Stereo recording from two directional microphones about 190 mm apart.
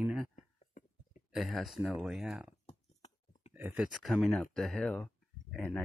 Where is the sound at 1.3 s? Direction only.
Centre (ahead or behind).